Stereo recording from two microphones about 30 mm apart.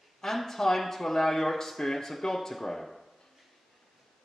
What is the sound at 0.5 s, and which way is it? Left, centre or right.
Speech, centre.